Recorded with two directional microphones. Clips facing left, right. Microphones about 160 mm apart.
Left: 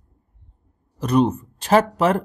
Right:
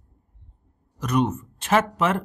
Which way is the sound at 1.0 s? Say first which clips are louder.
Left 5 dB; 30° left (ahead or behind).